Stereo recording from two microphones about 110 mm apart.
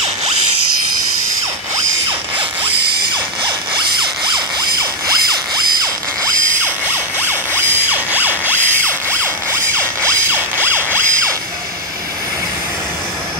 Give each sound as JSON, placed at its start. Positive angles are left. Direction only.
{"t": 3.4, "sound": "zipper", "side_deg": -45}
{"t": 7.2, "sound": "music", "side_deg": -20}
{"t": 10.0, "sound": "a sound", "side_deg": -20}